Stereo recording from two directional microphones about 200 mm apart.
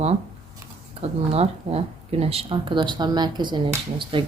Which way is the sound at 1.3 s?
30° right (ahead or behind).